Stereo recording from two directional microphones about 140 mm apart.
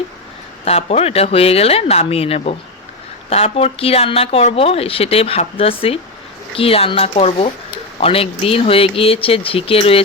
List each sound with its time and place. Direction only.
0.6 s speech: 45° left (ahead or behind)